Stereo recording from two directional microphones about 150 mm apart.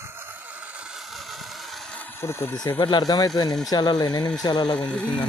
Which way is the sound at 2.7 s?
30° left (ahead or behind).